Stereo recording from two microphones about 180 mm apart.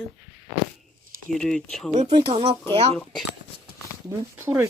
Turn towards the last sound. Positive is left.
turn(degrees=-15)  # may be behind; listen again after turning